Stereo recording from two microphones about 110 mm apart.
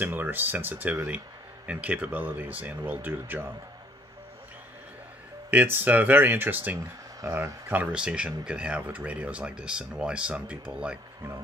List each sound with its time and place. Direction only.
0.0 s speech: 20° right (ahead or behind)
5.5 s speech: 15° right (ahead or behind)
7.2 s speech: 30° right (ahead or behind); by 11.0 s 10° right (ahead or behind)